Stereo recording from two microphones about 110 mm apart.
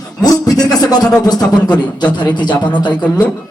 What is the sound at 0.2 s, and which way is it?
Speech, 35° left (ahead or behind).